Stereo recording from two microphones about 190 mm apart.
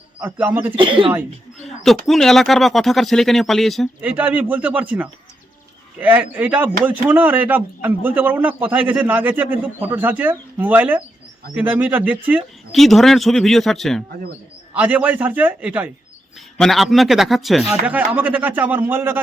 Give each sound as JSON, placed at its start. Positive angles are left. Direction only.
{"t": 0.2, "sound": "a man's voice", "side_deg": -10}
{"t": 0.8, "sound": "speech", "side_deg": -25}
{"t": 1.6, "sound": "a sound", "side_deg": 0}
{"t": 2.0, "sound": "a man's voice", "side_deg": 0}